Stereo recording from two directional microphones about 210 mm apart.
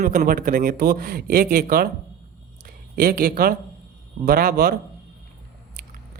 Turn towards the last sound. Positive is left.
turn(degrees=-45)  # may be behind; listen again after turning